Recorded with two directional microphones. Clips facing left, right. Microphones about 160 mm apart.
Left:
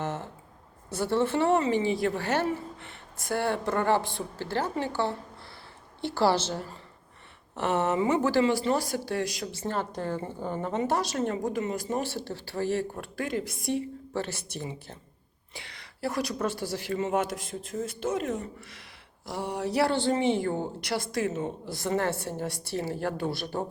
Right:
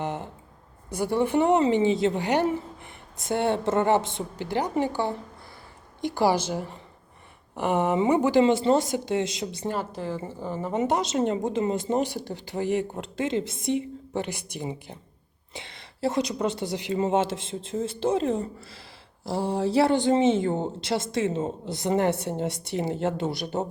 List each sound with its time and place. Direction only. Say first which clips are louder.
0.0 s a sound: right 2 dB; 15° right (ahead or behind)
0.9 s a woman's voice: right 2 dB; 15° right (ahead or behind)
9.9 s speech: even; 5° right (ahead or behind)